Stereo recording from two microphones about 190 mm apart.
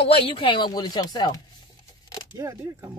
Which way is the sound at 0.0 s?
30° left (ahead or behind).